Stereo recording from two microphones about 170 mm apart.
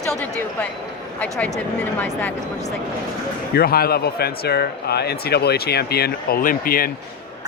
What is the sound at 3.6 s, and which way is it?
Speech, 65° left (ahead or behind).